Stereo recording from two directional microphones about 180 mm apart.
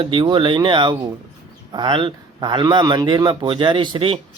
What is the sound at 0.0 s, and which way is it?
Speech, 25° right (ahead or behind).